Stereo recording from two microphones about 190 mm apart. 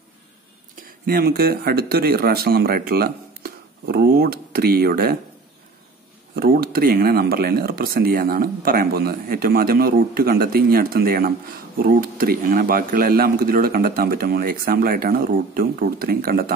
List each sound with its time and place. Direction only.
0.8 s speech: 50° right (ahead or behind)
6.3 s speech: 50° right (ahead or behind)